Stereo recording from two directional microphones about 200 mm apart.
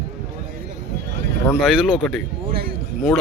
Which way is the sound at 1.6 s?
5° right (ahead or behind).